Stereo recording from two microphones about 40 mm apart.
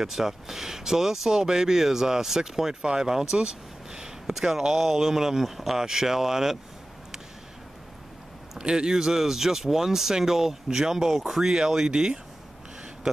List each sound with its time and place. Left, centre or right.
0.0 s speech: centre
8.5 s speech: centre
11.9 s speech: centre
13.0 s a sound: centre